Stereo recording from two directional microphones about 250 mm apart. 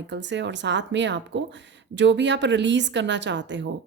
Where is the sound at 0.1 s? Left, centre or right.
Right.